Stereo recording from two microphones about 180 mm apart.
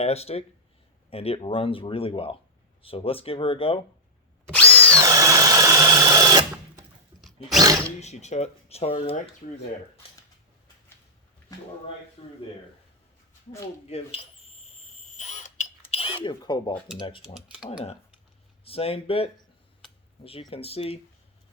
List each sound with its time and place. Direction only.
0.0 s speech: 35° left (ahead or behind)
4.5 s drill: 10° left (ahead or behind)
4.9 s sewing machine: 20° right (ahead or behind)
7.6 s speech: 20° right (ahead or behind)
8.0 s speech: 40° left (ahead or behind)
11.5 s speech: 20° left (ahead or behind)
12.2 s speech: 30° left (ahead or behind)
13.8 s speech: 35° left (ahead or behind)
15.0 s mechanisms: 40° left (ahead or behind); by 16.7 s 25° left (ahead or behind)
17.0 s speech: 30° left (ahead or behind)
18.6 s speech: 30° left (ahead or behind)
20.5 s speech: 30° left (ahead or behind)